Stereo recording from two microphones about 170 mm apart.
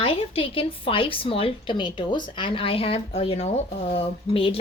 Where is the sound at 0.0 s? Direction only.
35° left (ahead or behind).